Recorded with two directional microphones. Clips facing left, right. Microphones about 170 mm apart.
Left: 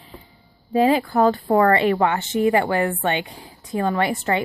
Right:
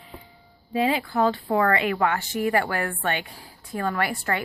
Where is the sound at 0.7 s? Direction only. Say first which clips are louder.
Left 6 dB; 40° left (ahead or behind).